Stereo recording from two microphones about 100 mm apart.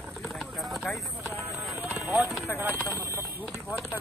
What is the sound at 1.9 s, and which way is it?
Clip-clop, 15° right (ahead or behind).